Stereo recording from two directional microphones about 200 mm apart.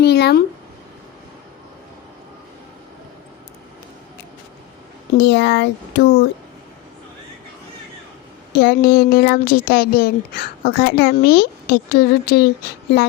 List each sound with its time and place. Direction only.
0.0 s a sound: 55° left (ahead or behind)
5.1 s a child's voice: 60° left (ahead or behind)
8.5 s speech: 50° left (ahead or behind)